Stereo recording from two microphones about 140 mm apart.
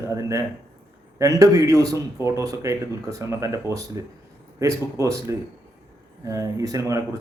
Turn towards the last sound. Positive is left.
turn(degrees=-25)  # may be behind; listen again after turning